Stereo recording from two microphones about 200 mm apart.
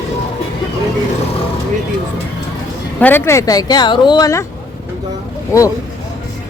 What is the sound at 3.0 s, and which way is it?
Speech, 10° left (ahead or behind).